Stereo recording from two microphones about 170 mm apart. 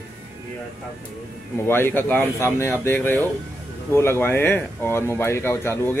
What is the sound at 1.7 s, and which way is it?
Speech, 15° left (ahead or behind).